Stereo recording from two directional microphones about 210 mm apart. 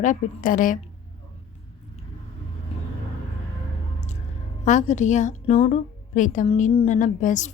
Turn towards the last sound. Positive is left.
turn(degrees=35)  # may be behind; listen again after turning